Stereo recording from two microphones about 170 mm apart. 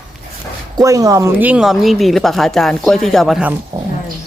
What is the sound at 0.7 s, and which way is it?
Speech, 20° right (ahead or behind).